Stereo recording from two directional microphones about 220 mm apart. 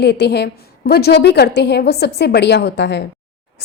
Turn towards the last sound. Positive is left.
turn(degrees=50)  # may be behind; listen again after turning